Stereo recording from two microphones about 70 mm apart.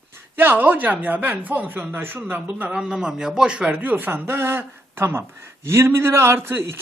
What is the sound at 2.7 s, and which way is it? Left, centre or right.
A man's voice, centre.